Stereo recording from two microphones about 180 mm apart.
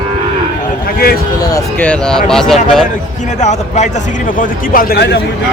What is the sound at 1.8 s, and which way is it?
Speech, 5° left (ahead or behind).